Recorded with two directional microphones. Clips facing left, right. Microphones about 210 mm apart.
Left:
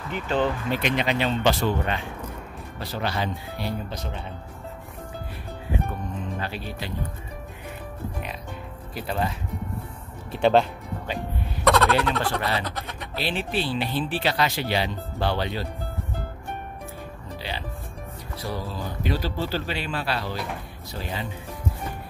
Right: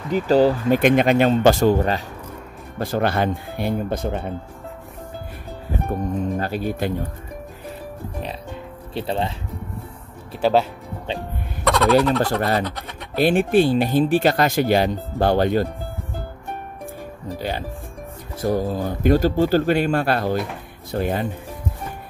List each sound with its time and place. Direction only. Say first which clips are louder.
0.1 s speech: right 9 dB; 35° right (ahead or behind)
0.7 s speech: right 10 dB; 50° right (ahead or behind)
2.8 s speech: right 8 dB; 50° right (ahead or behind)
5.7 s speech: right 6 dB; 40° right (ahead or behind)
8.9 s speech: right 4 dB; 30° right (ahead or behind)
10.3 s speech: right 1 dB; 5° right (ahead or behind)
11.6 s turkey: right 4 dB; centre (ahead or behind)
12.2 s speech: right 6 dB; 45° right (ahead or behind)
12.6 s speech: right 2 dB; centre (ahead or behind)
13.1 s speech: right 12 dB; 50° right (ahead or behind)
17.4 s speech: right 7 dB; 50° right (ahead or behind)